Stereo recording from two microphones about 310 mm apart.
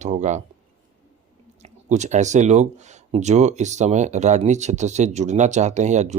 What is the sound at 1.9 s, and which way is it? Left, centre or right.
Speech, right.